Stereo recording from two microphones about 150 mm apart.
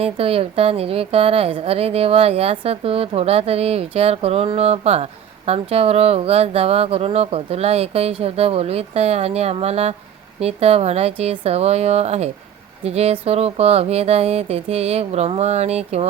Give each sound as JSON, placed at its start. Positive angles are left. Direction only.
{"t": 0.0, "sound": "a woman's voice", "side_deg": -40}